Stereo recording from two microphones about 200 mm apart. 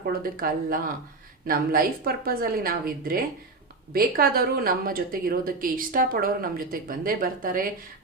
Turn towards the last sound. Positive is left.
turn(degrees=-45)  # may be behind; listen again after turning